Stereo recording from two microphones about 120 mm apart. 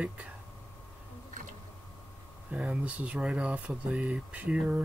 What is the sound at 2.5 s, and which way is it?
Speech, 10° right (ahead or behind).